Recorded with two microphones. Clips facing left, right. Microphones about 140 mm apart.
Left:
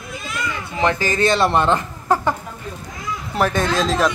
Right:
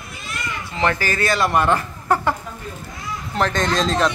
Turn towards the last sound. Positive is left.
turn(degrees=5)  # may be behind; listen again after turning